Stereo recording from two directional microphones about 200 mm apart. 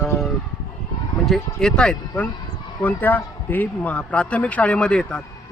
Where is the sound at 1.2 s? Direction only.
Centre (ahead or behind).